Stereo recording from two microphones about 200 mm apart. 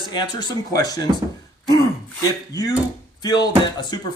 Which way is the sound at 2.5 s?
15° left (ahead or behind).